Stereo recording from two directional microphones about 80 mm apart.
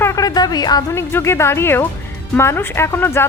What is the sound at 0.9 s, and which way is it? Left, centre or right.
Speech, left.